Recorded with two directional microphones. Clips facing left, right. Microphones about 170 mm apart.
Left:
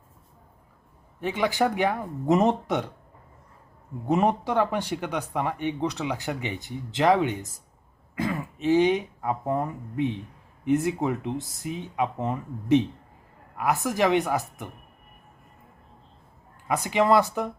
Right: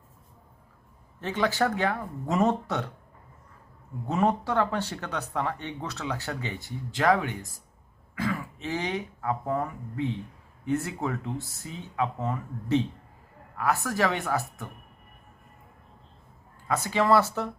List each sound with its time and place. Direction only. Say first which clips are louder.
1.2 s speech: left 2 dB; 15° left (ahead or behind)
4.0 s speech: left 2 dB; 15° left (ahead or behind)
16.6 s speech: left 2 dB; 15° left (ahead or behind)